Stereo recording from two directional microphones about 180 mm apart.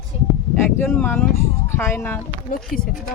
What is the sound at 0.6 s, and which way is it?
Speech, 10° left (ahead or behind).